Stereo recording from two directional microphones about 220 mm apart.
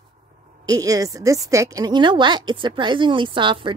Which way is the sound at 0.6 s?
15° right (ahead or behind).